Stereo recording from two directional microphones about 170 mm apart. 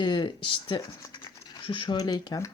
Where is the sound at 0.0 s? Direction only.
25° left (ahead or behind).